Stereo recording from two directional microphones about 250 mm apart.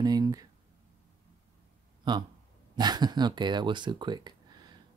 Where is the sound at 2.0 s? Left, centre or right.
Centre.